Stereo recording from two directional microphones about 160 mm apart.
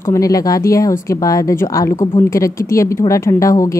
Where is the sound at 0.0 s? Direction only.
20° left (ahead or behind).